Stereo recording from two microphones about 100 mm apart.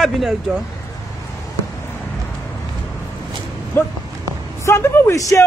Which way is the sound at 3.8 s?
25° left (ahead or behind).